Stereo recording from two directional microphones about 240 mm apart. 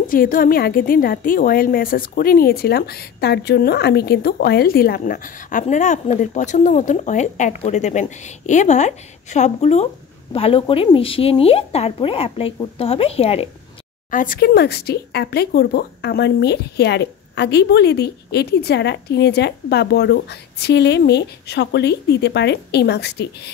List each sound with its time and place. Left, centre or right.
0.0 s a woman's voice: left
14.1 s speech: left